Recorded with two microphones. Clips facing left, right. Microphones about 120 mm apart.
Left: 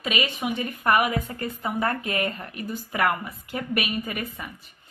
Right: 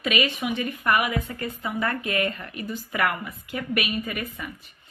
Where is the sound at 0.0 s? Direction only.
30° left (ahead or behind).